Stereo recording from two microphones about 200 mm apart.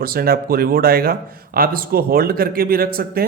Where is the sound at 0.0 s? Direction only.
50° right (ahead or behind).